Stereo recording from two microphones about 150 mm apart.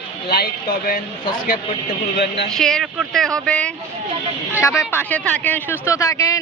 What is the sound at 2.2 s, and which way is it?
Speech, 90° left.